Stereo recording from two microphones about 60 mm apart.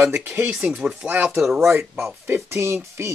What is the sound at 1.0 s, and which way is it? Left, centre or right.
Speech, right.